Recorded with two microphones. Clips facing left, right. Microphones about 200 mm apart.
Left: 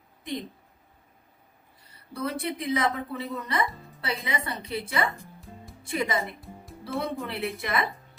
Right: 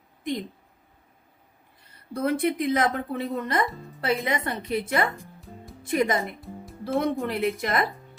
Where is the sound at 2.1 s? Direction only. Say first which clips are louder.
Right 7 dB; 55° right (ahead or behind).